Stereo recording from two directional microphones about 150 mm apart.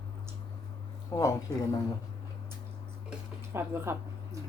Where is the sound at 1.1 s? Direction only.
20° left (ahead or behind).